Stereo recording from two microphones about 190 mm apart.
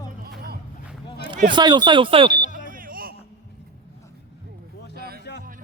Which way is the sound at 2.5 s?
45° right (ahead or behind).